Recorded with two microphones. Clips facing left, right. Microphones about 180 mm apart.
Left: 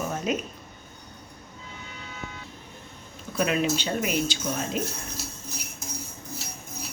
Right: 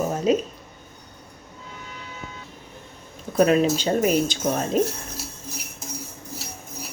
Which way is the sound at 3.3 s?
40° right (ahead or behind).